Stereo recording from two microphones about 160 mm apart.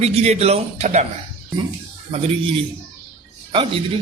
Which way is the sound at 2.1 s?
40° right (ahead or behind).